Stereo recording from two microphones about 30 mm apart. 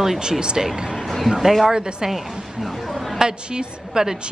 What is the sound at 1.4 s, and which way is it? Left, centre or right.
Speech, centre.